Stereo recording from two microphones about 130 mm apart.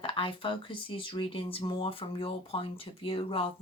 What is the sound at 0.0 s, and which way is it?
Speech, 40° left (ahead or behind).